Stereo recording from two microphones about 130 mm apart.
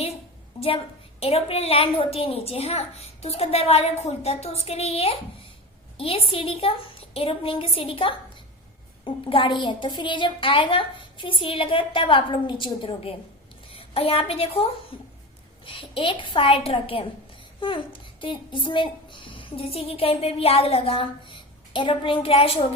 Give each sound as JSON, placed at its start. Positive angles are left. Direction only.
{"t": 1.2, "sound": "a child's voice", "side_deg": 50}
{"t": 14.9, "sound": "a sound", "side_deg": 45}
{"t": 15.6, "sound": "a child's voice", "side_deg": 45}